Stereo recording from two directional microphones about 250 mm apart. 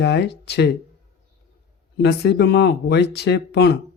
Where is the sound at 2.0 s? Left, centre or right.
Left.